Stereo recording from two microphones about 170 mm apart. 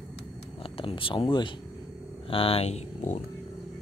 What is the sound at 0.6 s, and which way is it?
Speech, 30° left (ahead or behind).